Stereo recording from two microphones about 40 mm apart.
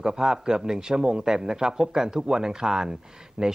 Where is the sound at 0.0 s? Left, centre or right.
Centre.